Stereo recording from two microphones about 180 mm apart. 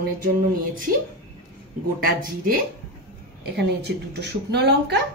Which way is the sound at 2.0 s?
50° right (ahead or behind).